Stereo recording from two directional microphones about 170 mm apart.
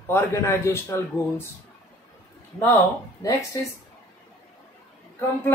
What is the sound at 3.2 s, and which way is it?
Speech, 20° left (ahead or behind).